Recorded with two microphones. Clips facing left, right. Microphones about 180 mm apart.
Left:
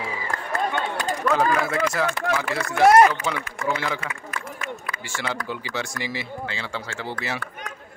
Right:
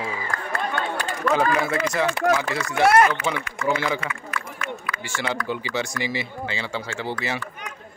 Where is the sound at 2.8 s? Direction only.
40° left (ahead or behind).